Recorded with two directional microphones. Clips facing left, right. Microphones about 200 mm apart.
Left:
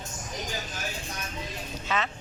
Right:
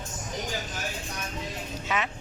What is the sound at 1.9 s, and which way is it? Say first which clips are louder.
Speech: even; 15° right (ahead or behind).